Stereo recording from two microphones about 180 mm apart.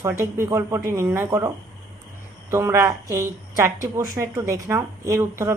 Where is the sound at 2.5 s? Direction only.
15° right (ahead or behind).